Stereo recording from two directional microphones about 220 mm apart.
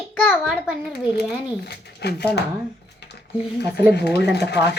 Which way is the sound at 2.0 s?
50° left (ahead or behind).